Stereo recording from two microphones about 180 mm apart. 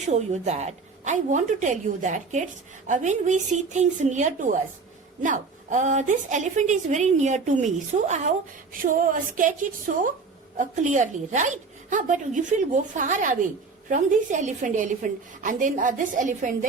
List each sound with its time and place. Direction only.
0.1 s a woman's voice: 40° right (ahead or behind)